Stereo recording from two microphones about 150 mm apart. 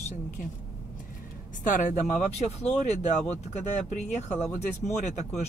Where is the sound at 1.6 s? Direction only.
55° left (ahead or behind).